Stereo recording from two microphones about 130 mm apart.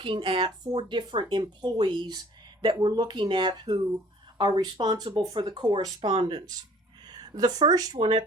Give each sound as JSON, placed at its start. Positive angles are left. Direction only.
{"t": 0.0, "sound": "speech", "side_deg": -40}